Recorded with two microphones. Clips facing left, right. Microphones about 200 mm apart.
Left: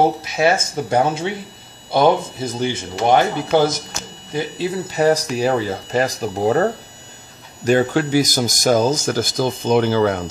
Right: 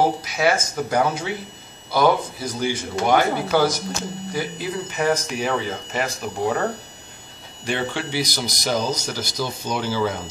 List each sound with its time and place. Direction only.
0.2 s speech: 25° left (ahead or behind)
7.6 s speech: 45° left (ahead or behind)